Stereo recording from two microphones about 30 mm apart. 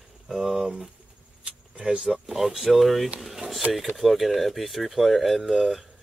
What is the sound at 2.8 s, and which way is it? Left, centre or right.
Speech, centre.